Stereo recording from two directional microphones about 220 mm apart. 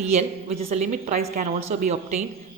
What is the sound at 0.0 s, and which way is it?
A woman's voice, 30° right (ahead or behind).